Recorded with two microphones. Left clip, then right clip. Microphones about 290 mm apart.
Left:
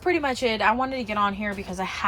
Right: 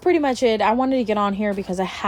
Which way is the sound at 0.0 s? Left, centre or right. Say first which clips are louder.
Right 5 dB; centre.